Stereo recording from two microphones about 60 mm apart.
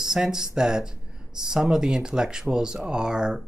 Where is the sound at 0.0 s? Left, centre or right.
Centre.